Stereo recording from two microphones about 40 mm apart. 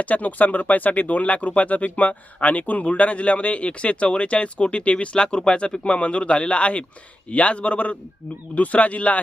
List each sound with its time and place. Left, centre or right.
0.0 s speech: left